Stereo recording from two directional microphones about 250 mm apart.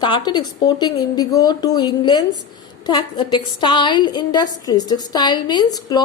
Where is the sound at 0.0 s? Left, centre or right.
Centre.